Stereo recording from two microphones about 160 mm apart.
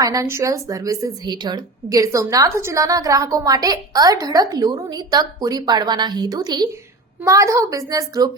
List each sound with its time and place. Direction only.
0.0 s a woman's voice: 20° right (ahead or behind)